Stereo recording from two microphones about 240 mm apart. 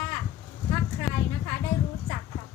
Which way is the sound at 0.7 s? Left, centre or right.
Centre.